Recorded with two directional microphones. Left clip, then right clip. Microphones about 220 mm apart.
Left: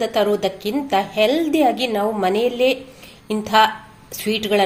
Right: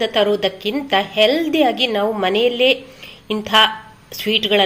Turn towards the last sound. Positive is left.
turn(degrees=0)  # may be behind; listen again after turning